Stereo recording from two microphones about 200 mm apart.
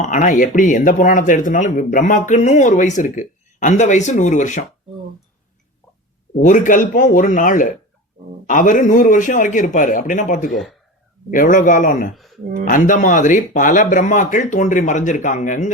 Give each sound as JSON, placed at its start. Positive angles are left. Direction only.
{"t": 0.0, "sound": "speech", "side_deg": 35}
{"t": 6.4, "sound": "speech", "side_deg": 40}
{"t": 10.5, "sound": "speech", "side_deg": 0}
{"t": 11.3, "sound": "speech", "side_deg": 40}